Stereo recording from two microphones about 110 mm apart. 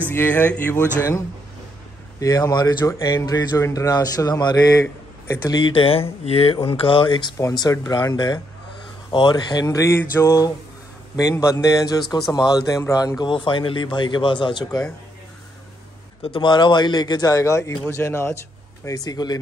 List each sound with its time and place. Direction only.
0.1 s speech: 20° left (ahead or behind)
2.1 s speech: 30° left (ahead or behind)
5.7 s speech: 55° left (ahead or behind)
7.3 s speech: 35° left (ahead or behind)
13.2 s speech: 45° left (ahead or behind)
16.3 s speech: 45° left (ahead or behind); by 18.4 s 25° left (ahead or behind)
18.9 s speech: 35° left (ahead or behind)